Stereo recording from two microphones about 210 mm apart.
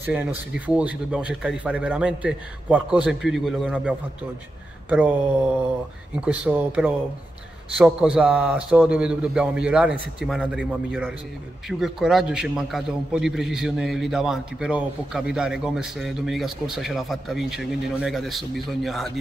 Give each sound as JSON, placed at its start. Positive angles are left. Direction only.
{"t": 0.0, "sound": "a man's voice", "side_deg": -10}
{"t": 6.2, "sound": "a man's voice", "side_deg": -5}